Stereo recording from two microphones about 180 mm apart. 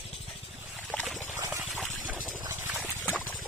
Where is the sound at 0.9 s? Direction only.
Centre (ahead or behind).